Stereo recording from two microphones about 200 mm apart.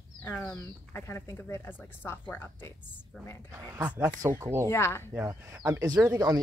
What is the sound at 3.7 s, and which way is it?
Speech, 10° right (ahead or behind).